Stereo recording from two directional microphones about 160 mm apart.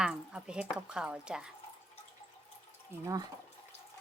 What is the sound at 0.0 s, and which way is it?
Speech, 5° right (ahead or behind).